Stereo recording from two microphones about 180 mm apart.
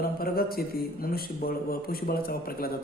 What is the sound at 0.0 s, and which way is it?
A man's voice, 55° left (ahead or behind).